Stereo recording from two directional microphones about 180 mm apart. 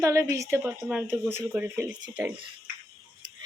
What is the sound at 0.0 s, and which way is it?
Speech, 15° right (ahead or behind).